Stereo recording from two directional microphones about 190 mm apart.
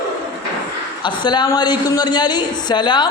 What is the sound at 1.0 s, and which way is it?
A man's voice, 25° left (ahead or behind).